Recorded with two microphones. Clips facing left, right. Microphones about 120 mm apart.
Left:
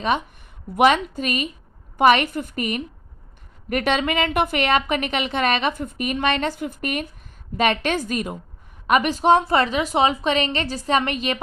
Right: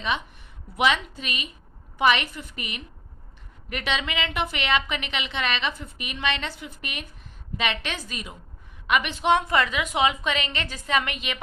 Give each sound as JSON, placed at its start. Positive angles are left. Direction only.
{"t": 0.8, "sound": "a woman's voice", "side_deg": 50}
{"t": 8.9, "sound": "a woman's voice", "side_deg": 40}